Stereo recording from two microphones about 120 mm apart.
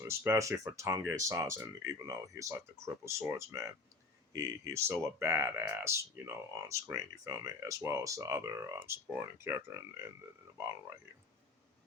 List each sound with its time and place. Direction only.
0.0 s speech: 25° right (ahead or behind)